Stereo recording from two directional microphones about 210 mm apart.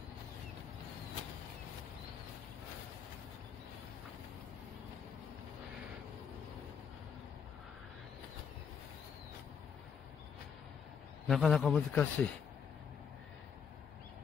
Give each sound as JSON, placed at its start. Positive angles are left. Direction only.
{"t": 11.2, "sound": "a man's voice", "side_deg": 0}